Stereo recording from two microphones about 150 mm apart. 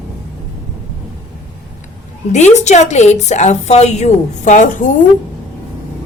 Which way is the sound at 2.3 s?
50° left (ahead or behind).